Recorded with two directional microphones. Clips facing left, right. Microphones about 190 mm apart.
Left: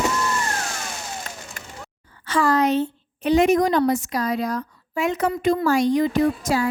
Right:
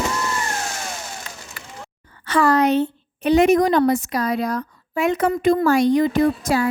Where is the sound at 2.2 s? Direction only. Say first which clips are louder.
Right 3 dB; 60° right (ahead or behind).